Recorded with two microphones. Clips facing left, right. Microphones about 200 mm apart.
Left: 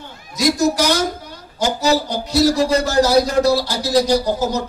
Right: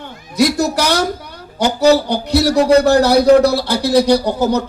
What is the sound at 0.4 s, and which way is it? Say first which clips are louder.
A man's voice: right 2 dB; 60° right (ahead or behind).